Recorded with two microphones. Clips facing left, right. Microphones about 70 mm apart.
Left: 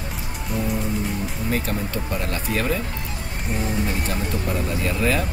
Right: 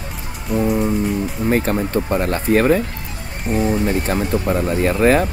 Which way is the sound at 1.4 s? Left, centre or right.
Right.